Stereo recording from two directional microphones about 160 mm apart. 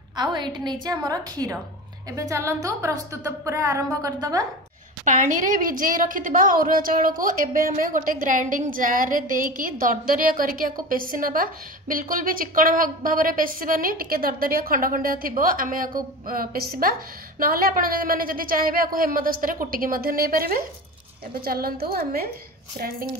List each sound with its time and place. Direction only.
0.1 s a woman's voice: 25° right (ahead or behind)
5.0 s a woman's voice: 50° right (ahead or behind); by 23.0 s 65° right (ahead or behind)